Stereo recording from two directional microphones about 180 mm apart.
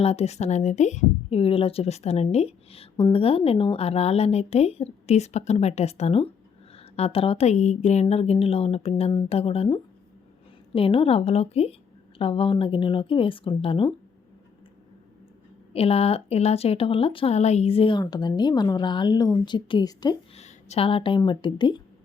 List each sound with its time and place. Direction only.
0.0 s a woman's voice: 35° left (ahead or behind)
15.7 s a woman's voice: 35° left (ahead or behind)
20.3 s a woman's voice: 35° left (ahead or behind)